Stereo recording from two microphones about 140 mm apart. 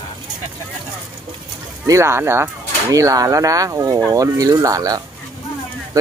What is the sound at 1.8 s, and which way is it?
Speech, 20° right (ahead or behind).